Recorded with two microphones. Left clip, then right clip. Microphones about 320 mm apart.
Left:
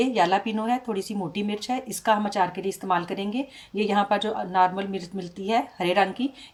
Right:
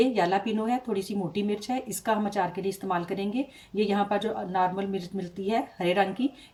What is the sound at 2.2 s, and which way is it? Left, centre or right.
Speech, centre.